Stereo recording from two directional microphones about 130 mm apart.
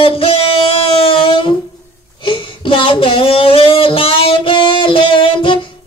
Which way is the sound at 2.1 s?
40° left (ahead or behind).